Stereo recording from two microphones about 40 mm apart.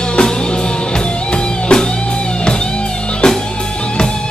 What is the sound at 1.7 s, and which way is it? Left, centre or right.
Music, left.